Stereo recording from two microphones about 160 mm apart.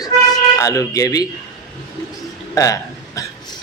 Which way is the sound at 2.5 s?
20° left (ahead or behind).